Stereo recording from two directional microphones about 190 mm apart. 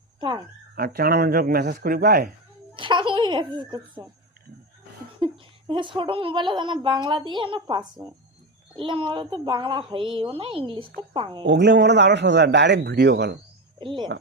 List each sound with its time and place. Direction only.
0.2 s speech: 25° right (ahead or behind)
0.8 s speech: 50° right (ahead or behind)
2.7 s a child's voice: 25° right (ahead or behind)
5.2 s a woman's voice: 25° right (ahead or behind)
11.4 s a man's voice: 65° right (ahead or behind)
13.7 s speech: 25° right (ahead or behind)